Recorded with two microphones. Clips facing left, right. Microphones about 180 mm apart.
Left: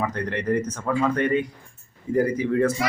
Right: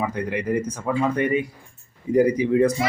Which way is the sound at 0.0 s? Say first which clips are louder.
Right 1 dB; 10° right (ahead or behind).